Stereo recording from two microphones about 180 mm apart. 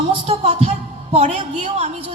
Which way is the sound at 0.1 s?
35° right (ahead or behind).